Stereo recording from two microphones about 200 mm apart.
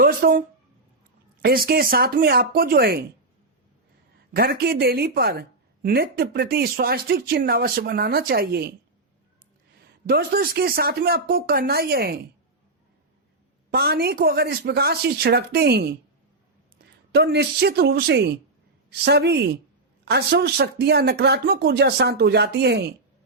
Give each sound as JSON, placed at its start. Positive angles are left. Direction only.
{"t": 0.0, "sound": "a sound", "side_deg": -45}
{"t": 1.4, "sound": "a woman's voice", "side_deg": -50}
{"t": 4.4, "sound": "a woman's voice", "side_deg": -50}
{"t": 9.8, "sound": "a woman's voice", "side_deg": -50}
{"t": 13.7, "sound": "a woman's voice", "side_deg": -50}
{"t": 17.1, "sound": "a woman's voice", "side_deg": -55}